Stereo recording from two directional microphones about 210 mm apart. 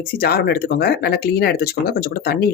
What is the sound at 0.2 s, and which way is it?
Speech, 50° left (ahead or behind).